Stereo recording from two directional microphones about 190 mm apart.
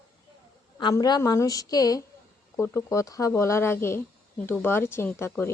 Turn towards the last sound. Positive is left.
turn(degrees=15)  # may be behind; listen again after turning